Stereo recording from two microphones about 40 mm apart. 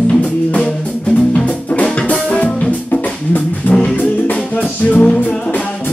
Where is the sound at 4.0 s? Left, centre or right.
Left.